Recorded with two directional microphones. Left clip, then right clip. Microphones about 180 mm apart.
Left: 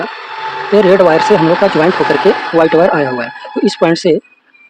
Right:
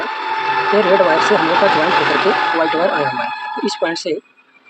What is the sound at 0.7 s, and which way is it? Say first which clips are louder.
Speech: left 8 dB; 60° left (ahead or behind).